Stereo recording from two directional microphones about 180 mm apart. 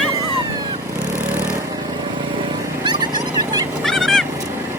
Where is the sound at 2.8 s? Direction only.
25° right (ahead or behind).